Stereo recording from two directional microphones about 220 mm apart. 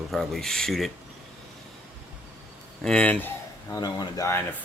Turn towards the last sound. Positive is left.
turn(degrees=15)  # may be behind; listen again after turning